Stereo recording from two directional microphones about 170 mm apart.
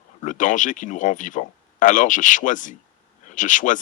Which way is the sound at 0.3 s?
50° left (ahead or behind).